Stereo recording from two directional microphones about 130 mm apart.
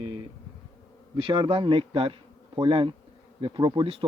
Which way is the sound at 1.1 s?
40° right (ahead or behind).